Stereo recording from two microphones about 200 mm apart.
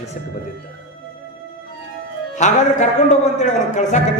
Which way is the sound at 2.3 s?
35° left (ahead or behind).